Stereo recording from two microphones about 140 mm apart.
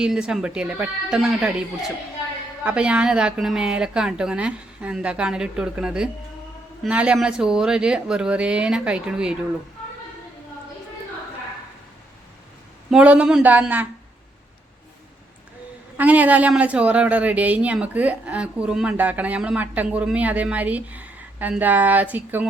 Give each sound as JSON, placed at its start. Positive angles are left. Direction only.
{"t": 0.0, "sound": "a woman's voice", "side_deg": -5}
{"t": 2.6, "sound": "a woman's voice", "side_deg": -5}
{"t": 12.9, "sound": "a woman's voice", "side_deg": -10}
{"t": 16.0, "sound": "a woman's voice", "side_deg": -10}